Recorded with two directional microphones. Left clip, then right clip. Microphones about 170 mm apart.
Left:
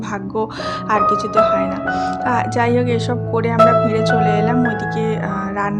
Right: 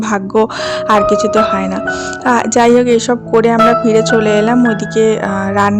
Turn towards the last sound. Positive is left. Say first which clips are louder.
# right 8 dB
turn(degrees=-45)  # may be behind; listen again after turning